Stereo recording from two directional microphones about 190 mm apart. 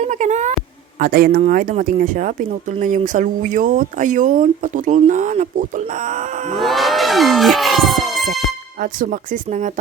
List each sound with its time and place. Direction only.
0.0 s a sound: 40° right (ahead or behind)
0.9 s speech: 50° right (ahead or behind)
6.6 s music: centre (ahead or behind)
8.8 s speech: 45° right (ahead or behind)